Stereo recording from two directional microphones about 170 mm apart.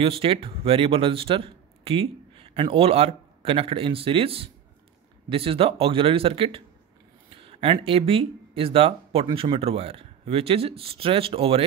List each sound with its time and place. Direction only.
0.0 s speech: 35° right (ahead or behind)